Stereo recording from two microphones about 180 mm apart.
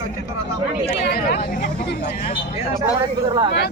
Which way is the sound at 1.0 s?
65° left (ahead or behind).